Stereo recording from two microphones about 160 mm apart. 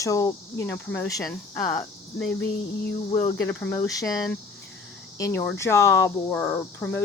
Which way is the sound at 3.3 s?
10° left (ahead or behind).